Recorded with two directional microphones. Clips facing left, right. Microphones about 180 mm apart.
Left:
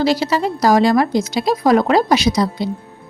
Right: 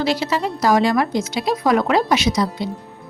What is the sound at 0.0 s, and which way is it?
Speech, 35° left (ahead or behind).